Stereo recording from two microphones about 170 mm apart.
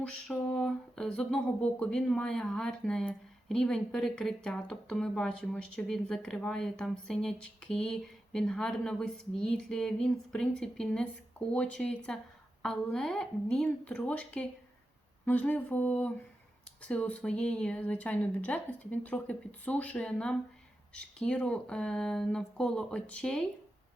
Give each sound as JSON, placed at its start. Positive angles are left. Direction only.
{"t": 0.0, "sound": "speech", "side_deg": 0}